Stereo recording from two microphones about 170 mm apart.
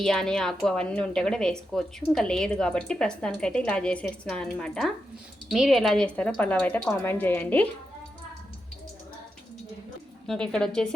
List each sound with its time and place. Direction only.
0.0 s speech: centre (ahead or behind)
10.2 s speech: 5° left (ahead or behind)